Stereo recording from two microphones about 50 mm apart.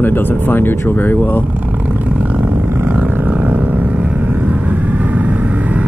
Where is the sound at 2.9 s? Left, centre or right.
Right.